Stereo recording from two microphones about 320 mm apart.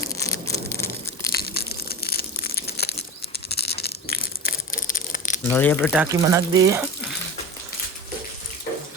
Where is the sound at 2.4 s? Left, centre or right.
Left.